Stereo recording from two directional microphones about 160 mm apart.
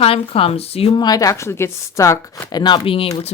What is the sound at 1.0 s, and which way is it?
Speech, 20° left (ahead or behind).